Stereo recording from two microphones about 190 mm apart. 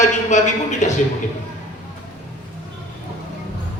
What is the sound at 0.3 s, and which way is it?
Speech, 40° left (ahead or behind).